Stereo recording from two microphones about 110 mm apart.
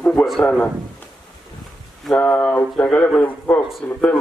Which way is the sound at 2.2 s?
15° left (ahead or behind).